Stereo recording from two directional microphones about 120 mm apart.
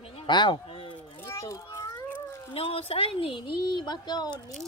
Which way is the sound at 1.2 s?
25° left (ahead or behind).